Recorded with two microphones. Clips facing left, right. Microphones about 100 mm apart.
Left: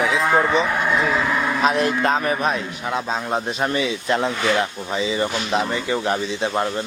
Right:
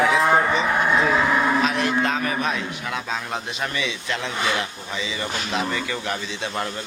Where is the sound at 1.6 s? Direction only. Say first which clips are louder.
Left 3 dB; 40° left (ahead or behind).